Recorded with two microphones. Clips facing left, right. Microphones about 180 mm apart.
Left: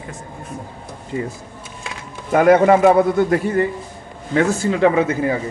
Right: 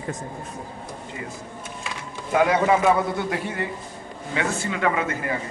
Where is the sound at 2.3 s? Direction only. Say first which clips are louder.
Left 7 dB; 50° left (ahead or behind); by 5.1 s 30° left (ahead or behind).